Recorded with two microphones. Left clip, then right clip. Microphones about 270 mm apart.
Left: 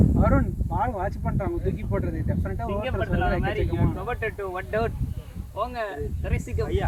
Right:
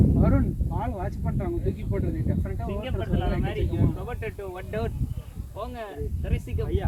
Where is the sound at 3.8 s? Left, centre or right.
Centre.